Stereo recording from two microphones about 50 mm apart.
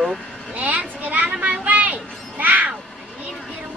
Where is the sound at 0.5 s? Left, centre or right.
Right.